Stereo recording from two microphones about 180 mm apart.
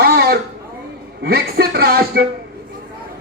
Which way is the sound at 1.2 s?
60° right (ahead or behind).